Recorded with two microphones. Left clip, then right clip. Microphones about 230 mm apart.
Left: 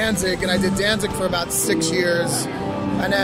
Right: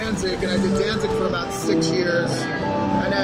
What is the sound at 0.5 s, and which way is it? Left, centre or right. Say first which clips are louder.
Speech: left 1 dB; left.